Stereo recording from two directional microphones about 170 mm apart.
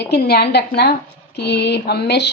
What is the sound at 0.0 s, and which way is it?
Speech, 70° left (ahead or behind).